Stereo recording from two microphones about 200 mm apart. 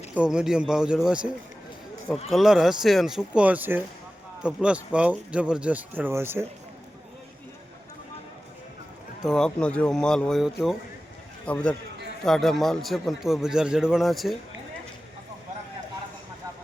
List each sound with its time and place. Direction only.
0.1 s a man's voice: 5° right (ahead or behind)
2.3 s a man's voice: centre (ahead or behind)
9.2 s a man's voice: 5° left (ahead or behind)